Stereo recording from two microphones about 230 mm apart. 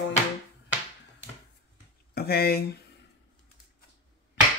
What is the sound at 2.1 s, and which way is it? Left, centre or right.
Speech, left.